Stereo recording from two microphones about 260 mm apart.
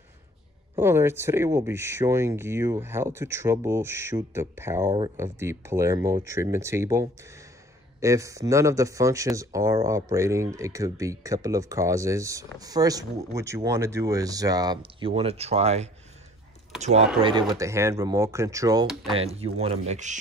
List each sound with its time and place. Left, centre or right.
0.7 s speech: centre; by 20.2 s right